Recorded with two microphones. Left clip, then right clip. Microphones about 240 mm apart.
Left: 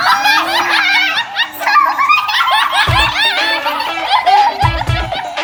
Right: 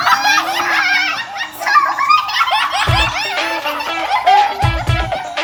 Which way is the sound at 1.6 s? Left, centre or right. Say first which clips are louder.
Left 1 dB; centre.